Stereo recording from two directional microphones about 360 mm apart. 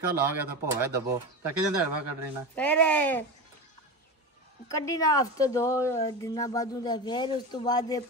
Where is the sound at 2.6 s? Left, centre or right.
Centre.